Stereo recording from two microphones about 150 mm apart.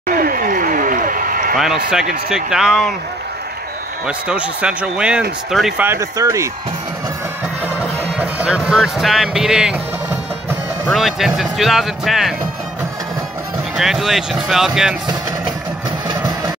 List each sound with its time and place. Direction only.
0.1 s a sound: 70° right (ahead or behind)
2.2 s speech: 5° right (ahead or behind)
4.3 s speech: 10° right (ahead or behind)
5.9 s speech: 20° right (ahead or behind)
7.8 s music: 10° right (ahead or behind)
10.9 s speech: centre (ahead or behind)
13.7 s speech: 5° right (ahead or behind)
16.1 s vehicle: 30° right (ahead or behind)